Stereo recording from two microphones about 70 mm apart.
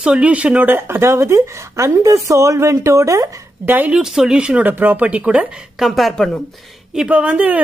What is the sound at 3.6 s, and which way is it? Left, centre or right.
Speech, right.